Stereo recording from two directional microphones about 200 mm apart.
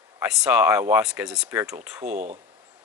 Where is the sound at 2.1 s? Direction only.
35° right (ahead or behind).